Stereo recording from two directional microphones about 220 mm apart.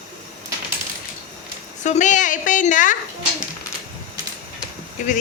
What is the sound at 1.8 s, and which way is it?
A woman's voice, 35° left (ahead or behind).